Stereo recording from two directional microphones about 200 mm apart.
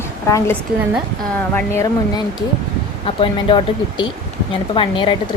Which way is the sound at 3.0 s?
25° left (ahead or behind).